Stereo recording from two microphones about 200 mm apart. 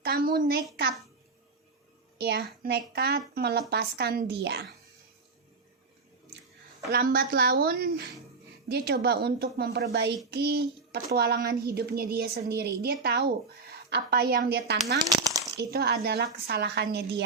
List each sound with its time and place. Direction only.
0.0 s a child's voice: 50° right (ahead or behind)
2.1 s a woman's voice: 55° right (ahead or behind)
6.9 s a woman's voice: 45° right (ahead or behind)
15.0 s speech: 20° right (ahead or behind)
15.5 s a woman's voice: 55° right (ahead or behind)